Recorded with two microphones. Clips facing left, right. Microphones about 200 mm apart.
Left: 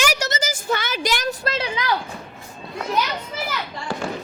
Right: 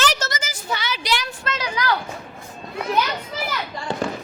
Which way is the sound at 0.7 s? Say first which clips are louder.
Left 1 dB; 50° left (ahead or behind).